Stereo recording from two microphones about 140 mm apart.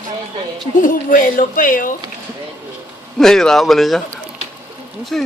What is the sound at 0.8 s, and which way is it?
Speech, 80° left.